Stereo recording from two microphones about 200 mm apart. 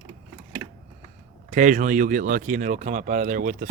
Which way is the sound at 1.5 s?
40° right (ahead or behind).